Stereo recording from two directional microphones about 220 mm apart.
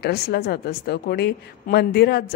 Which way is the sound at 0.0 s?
45° left (ahead or behind).